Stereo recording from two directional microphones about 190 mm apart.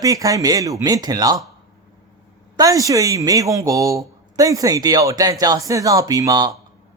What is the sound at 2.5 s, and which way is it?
A man's voice, 20° right (ahead or behind).